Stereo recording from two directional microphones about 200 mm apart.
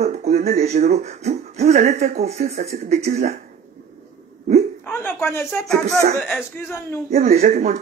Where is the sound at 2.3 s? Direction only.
50° right (ahead or behind).